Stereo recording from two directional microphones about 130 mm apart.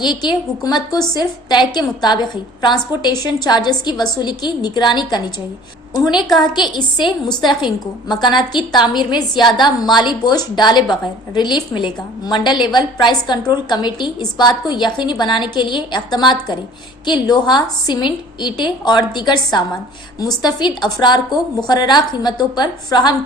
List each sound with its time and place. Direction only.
0.0 s a woman's voice: 35° left (ahead or behind)
8.9 s a woman's voice: 35° left (ahead or behind)